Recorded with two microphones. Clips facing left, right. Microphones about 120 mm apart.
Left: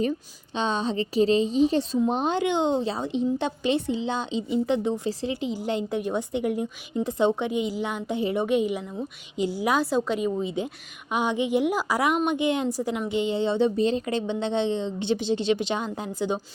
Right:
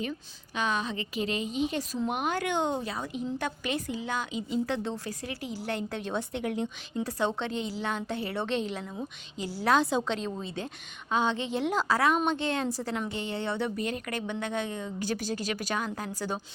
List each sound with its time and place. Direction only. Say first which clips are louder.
0.5 s a woman's voice: left 5 dB; 30° left (ahead or behind); by 7.0 s 10° left (ahead or behind)
7.0 s a woman's voice: left 7 dB; 20° left (ahead or behind)
9.7 s a woman's voice: left 2 dB; 5° left (ahead or behind); by 16.4 s 20° left (ahead or behind)